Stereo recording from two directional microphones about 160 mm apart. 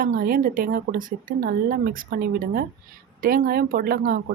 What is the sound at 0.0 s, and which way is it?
Speech, 65° right (ahead or behind).